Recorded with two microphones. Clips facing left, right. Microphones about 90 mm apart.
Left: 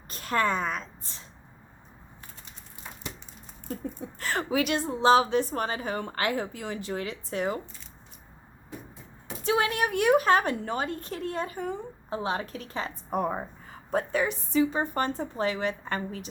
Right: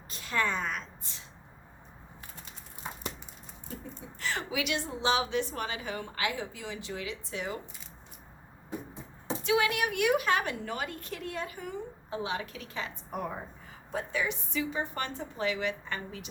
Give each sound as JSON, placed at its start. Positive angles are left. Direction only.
{"t": 0.1, "sound": "a woman's voice", "side_deg": 50}
{"t": 4.0, "sound": "a woman's voice", "side_deg": 45}
{"t": 9.4, "sound": "a woman's voice", "side_deg": 35}